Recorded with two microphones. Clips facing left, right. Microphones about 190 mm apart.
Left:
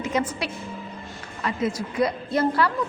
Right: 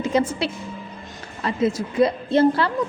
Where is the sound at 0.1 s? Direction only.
25° right (ahead or behind).